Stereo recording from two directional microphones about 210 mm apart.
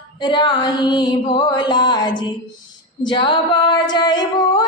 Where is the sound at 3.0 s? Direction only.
20° left (ahead or behind).